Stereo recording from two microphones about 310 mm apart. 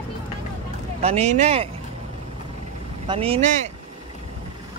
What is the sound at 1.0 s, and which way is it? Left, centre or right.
Speech, right.